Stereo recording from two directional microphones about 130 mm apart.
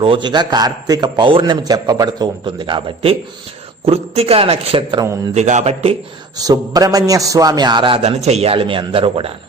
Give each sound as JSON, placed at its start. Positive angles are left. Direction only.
{"t": 0.0, "sound": "a man's voice", "side_deg": -40}
{"t": 4.9, "sound": "a man's voice", "side_deg": -30}
{"t": 5.3, "sound": "a man's voice", "side_deg": -65}
{"t": 6.3, "sound": "a man's voice", "side_deg": -30}
{"t": 8.0, "sound": "speech", "side_deg": -55}